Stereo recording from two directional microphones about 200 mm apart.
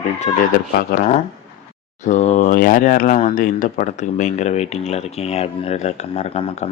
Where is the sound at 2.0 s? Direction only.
35° left (ahead or behind).